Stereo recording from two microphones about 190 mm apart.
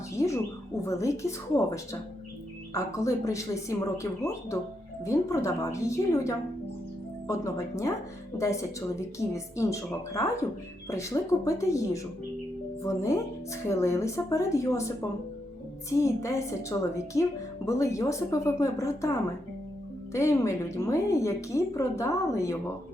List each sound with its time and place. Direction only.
0.2 s a woman's voice: 15° left (ahead or behind)
9.0 s a woman's voice: 15° left (ahead or behind)
15.9 s a woman's voice: 15° left (ahead or behind)
20.1 s a woman's voice: 15° left (ahead or behind)